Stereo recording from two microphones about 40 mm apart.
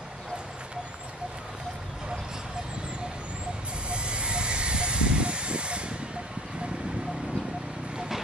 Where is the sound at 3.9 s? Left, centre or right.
Right.